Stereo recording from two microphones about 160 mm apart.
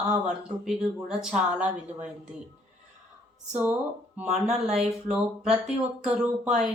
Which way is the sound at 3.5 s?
10° right (ahead or behind).